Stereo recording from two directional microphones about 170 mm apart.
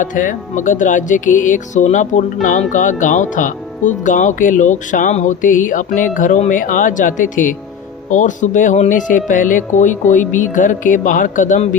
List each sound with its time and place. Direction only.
0.0 s speech: 50° left (ahead or behind)